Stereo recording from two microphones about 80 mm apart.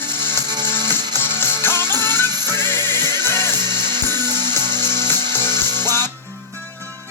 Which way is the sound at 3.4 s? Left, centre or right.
Right.